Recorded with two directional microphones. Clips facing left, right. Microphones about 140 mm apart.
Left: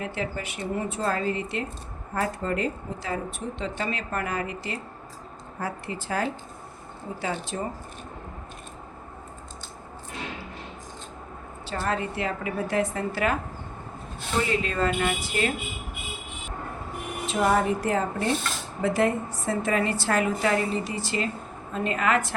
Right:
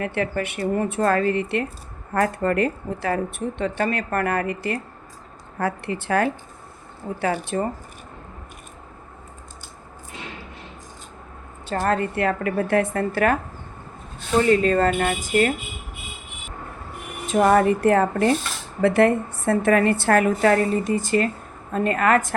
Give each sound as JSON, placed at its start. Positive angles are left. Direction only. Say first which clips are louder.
{"t": 0.0, "sound": "speech", "louder": "right 6 dB", "side_deg": -60}
{"t": 11.7, "sound": "speech", "louder": "right 6 dB", "side_deg": -50}
{"t": 14.4, "sound": "speech", "louder": "right 9 dB", "side_deg": -45}
{"t": 17.2, "sound": "speech", "louder": "right 6 dB", "side_deg": -55}